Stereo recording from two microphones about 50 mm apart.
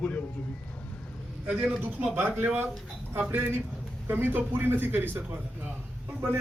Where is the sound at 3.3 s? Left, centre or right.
Right.